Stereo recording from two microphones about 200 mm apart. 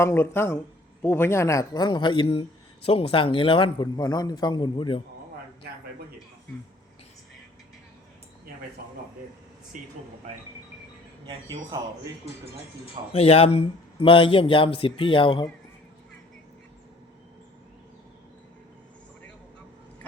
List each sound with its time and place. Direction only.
0.0 s speech: 10° left (ahead or behind)
9.7 s speech: 40° right (ahead or behind)
11.3 s speech: 15° right (ahead or behind)
12.8 s speech: 30° left (ahead or behind)